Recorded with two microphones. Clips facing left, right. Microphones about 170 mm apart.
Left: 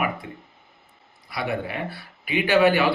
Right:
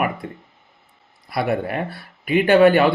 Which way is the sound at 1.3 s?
55° right (ahead or behind).